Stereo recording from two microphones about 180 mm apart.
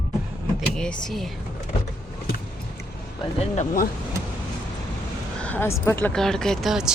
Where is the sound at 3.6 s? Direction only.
50° left (ahead or behind).